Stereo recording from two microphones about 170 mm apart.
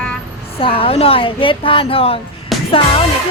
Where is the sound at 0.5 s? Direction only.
35° left (ahead or behind).